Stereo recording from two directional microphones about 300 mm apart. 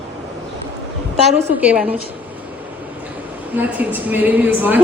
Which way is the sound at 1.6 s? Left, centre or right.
Centre.